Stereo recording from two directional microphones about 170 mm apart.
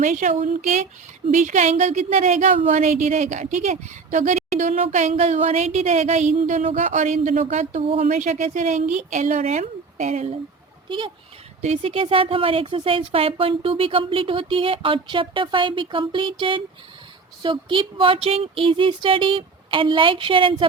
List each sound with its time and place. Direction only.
0.0 s a woman's voice: 45° right (ahead or behind); by 20.7 s 30° right (ahead or behind)